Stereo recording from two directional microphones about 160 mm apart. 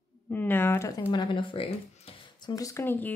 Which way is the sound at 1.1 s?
30° left (ahead or behind).